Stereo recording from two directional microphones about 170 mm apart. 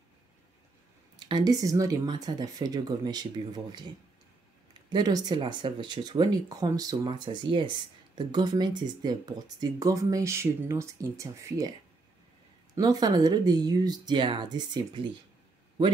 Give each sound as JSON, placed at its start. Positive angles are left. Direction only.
{"t": 1.2, "sound": "speech", "side_deg": -25}
{"t": 4.8, "sound": "speech", "side_deg": -25}
{"t": 12.7, "sound": "speech", "side_deg": -20}